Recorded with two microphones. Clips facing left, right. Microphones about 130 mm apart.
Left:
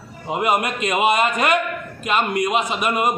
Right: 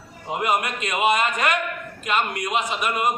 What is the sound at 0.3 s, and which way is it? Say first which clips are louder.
A man's voice: left 3 dB; 10° left (ahead or behind).